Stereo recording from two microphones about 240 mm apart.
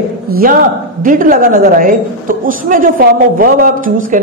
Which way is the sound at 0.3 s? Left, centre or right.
Right.